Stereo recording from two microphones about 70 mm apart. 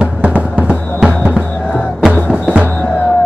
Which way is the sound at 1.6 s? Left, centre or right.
Centre.